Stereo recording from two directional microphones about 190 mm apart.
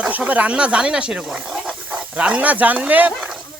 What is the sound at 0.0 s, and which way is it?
Speech, 5° right (ahead or behind).